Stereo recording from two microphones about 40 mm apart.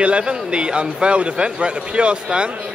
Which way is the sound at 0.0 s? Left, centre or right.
Right.